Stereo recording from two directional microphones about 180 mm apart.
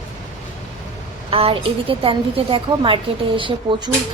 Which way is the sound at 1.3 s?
30° right (ahead or behind).